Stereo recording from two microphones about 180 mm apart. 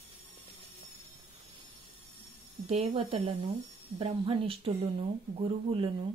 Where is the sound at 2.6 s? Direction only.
30° right (ahead or behind).